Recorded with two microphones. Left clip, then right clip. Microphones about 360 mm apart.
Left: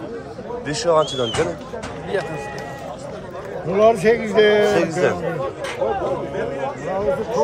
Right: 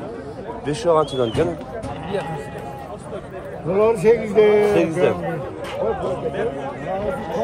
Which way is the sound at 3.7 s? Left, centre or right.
Centre.